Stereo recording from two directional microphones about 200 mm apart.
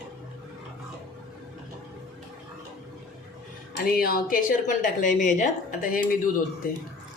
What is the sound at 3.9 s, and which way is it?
Speech, 45° left (ahead or behind).